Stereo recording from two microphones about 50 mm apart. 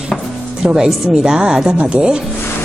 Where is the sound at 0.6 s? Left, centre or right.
Centre.